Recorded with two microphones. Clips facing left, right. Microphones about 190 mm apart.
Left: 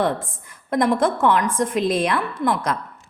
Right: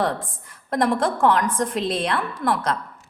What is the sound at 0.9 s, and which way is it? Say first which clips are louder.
Speech: left 1 dB; 5° left (ahead or behind).